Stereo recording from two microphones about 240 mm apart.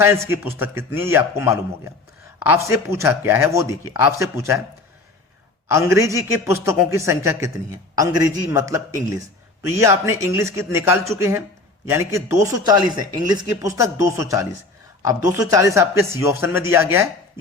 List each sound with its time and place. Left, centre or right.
0.0 s speech: centre
5.6 s speech: centre